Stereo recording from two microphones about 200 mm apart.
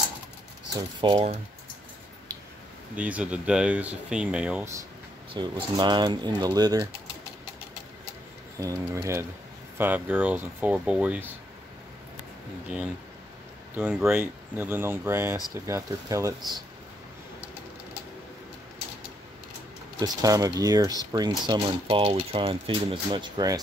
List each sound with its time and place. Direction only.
1.0 s speech: 25° right (ahead or behind)
3.0 s speech: 5° right (ahead or behind)
5.3 s speech: 20° right (ahead or behind)
8.5 s speech: 15° right (ahead or behind)
13.7 s speech: 10° right (ahead or behind)
20.0 s speech: 20° right (ahead or behind)